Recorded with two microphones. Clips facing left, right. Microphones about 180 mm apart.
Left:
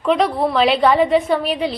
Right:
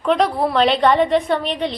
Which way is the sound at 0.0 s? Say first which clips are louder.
Left 1 dB; centre (ahead or behind).